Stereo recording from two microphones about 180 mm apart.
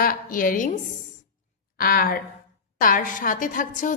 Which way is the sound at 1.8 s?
55° left (ahead or behind).